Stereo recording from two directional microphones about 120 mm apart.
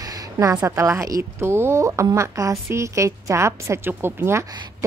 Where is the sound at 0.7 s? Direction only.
25° right (ahead or behind).